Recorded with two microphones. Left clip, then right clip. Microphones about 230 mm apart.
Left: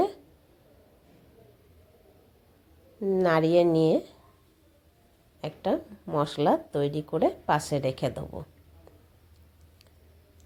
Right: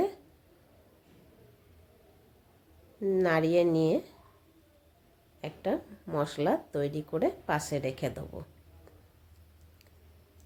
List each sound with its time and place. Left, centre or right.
3.0 s speech: centre
5.4 s speech: centre